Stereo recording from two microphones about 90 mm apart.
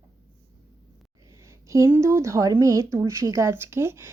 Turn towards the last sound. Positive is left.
turn(degrees=-30)  # may be behind; listen again after turning